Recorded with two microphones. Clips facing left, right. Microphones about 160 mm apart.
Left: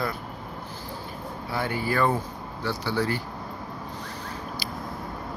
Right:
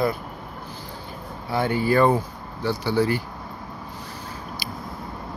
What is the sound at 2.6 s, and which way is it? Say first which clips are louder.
Speech: right 5 dB; 15° right (ahead or behind).